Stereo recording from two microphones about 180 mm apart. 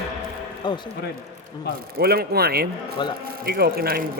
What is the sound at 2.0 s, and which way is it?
Speech, 60° right (ahead or behind).